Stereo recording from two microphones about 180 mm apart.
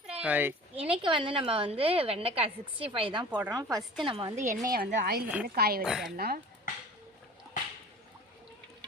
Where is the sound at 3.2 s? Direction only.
10° right (ahead or behind).